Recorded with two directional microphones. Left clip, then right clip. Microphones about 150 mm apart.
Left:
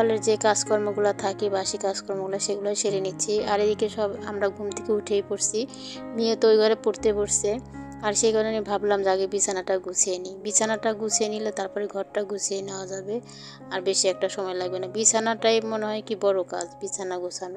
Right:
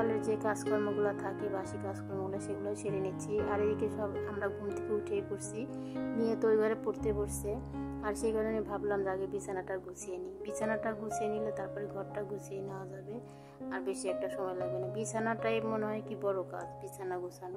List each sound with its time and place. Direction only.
0.0 s a woman's voice: 35° left (ahead or behind)
13.7 s a woman's voice: 35° left (ahead or behind)